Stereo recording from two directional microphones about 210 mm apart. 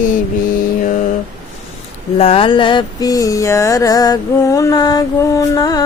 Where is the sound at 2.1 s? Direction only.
25° left (ahead or behind).